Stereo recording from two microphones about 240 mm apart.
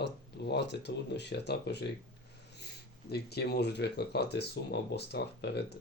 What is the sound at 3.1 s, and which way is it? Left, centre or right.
Speech, left.